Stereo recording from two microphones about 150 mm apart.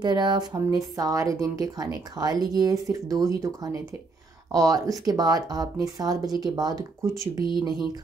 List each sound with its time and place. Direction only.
0.0 s speech: 30° right (ahead or behind)